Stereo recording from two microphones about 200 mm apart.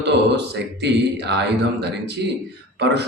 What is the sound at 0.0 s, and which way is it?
Speech, 55° right (ahead or behind).